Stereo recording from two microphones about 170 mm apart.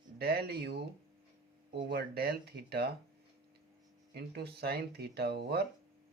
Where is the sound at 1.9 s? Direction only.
70° right (ahead or behind).